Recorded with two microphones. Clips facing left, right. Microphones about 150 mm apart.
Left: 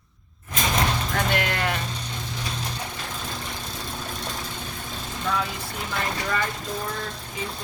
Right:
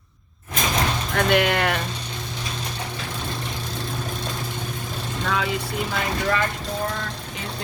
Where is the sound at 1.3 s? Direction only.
65° right (ahead or behind).